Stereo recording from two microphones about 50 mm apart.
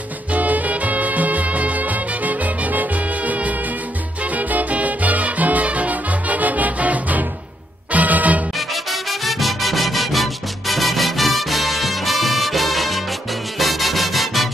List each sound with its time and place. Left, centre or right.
0.3 s music: right
8.5 s music: centre